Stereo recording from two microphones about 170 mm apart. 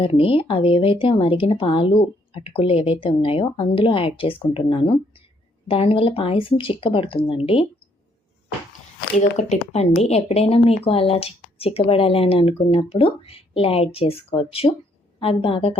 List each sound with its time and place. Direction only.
0.0 s speech: 35° left (ahead or behind)
9.4 s speech: 40° left (ahead or behind)